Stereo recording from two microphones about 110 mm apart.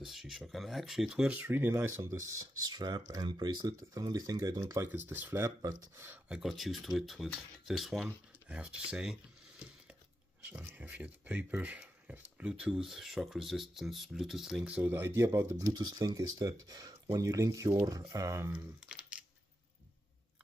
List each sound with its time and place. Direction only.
0.0 s speech: centre (ahead or behind); by 4.8 s 30° right (ahead or behind)
4.8 s speech: 20° right (ahead or behind)
5.4 s speech: 30° right (ahead or behind)
6.0 s speech: 10° right (ahead or behind)
10.4 s speech: 20° right (ahead or behind); by 14.6 s 5° right (ahead or behind)
14.7 s speech: 15° right (ahead or behind)
15.7 s speech: 40° right (ahead or behind)
18.9 s a sound: 10° right (ahead or behind)